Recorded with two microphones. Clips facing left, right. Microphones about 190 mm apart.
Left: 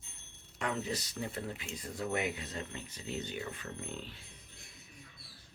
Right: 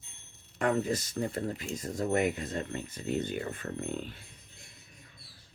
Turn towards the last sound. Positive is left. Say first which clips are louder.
# right 7 dB
turn(degrees=-50)  # may be behind; listen again after turning